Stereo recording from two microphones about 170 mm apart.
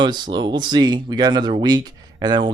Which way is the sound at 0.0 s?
25° right (ahead or behind).